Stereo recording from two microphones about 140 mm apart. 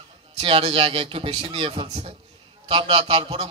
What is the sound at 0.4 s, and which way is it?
A man's voice, 40° right (ahead or behind).